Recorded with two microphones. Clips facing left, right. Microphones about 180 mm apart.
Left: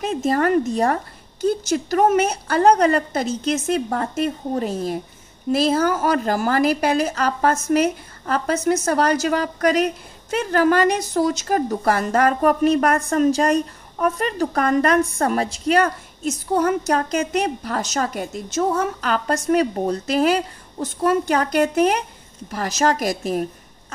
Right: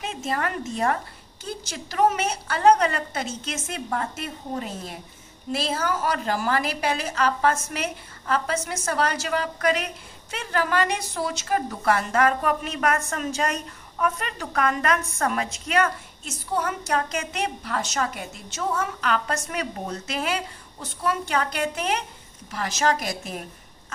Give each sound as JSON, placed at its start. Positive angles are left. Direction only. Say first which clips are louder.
{"t": 0.0, "sound": "a woman's voice", "louder": "left 9 dB", "side_deg": 40}